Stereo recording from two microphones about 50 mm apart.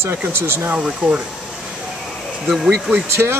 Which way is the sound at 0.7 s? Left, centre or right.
Right.